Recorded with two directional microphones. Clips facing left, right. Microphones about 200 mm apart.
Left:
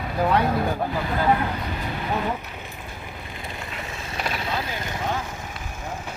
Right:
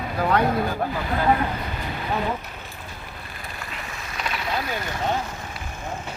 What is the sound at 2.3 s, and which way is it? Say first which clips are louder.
Vehicle: left 1 dB; 15° left (ahead or behind).